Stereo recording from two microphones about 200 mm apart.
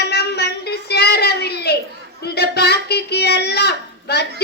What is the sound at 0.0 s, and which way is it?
Child singing, 55° left (ahead or behind).